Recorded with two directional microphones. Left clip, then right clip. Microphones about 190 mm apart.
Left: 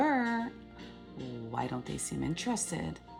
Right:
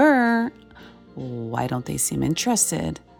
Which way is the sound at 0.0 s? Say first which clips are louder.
Right 12 dB; 60° right (ahead or behind).